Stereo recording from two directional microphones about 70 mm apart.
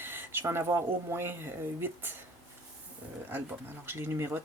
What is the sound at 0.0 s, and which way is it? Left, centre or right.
Speech, right.